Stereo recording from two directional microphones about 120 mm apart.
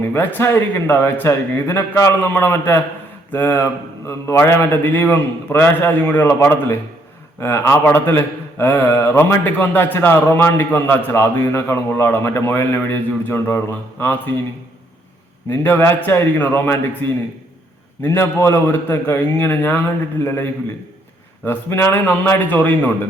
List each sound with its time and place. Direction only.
0.0 s a man's voice: 15° left (ahead or behind)
15.4 s a man's voice: 20° left (ahead or behind)